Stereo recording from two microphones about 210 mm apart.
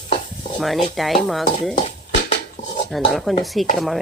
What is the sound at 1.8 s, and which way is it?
Dishes, 30° left (ahead or behind).